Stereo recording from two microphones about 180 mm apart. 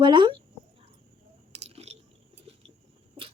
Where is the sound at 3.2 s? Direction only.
30° right (ahead or behind).